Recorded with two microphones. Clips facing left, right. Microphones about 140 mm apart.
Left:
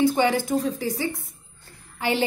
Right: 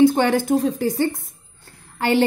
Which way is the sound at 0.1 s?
55° right (ahead or behind).